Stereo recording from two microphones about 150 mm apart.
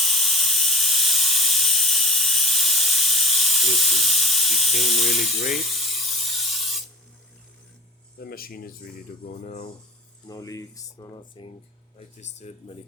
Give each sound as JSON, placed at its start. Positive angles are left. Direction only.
{"t": 0.0, "sound": "steam", "side_deg": 0}
{"t": 5.5, "sound": "spray", "side_deg": 0}
{"t": 8.2, "sound": "speech", "side_deg": 85}
{"t": 9.3, "sound": "speech", "side_deg": 55}
{"t": 10.2, "sound": "speech", "side_deg": 20}
{"t": 11.9, "sound": "speech", "side_deg": 50}